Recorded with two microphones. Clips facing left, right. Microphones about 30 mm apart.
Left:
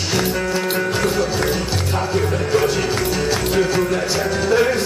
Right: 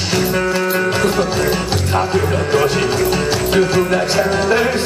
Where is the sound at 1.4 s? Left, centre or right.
Right.